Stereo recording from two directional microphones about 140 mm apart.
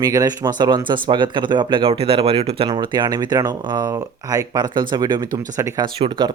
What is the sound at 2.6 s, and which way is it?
Speech, 35° right (ahead or behind).